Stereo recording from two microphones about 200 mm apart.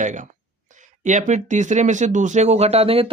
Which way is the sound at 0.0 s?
40° right (ahead or behind).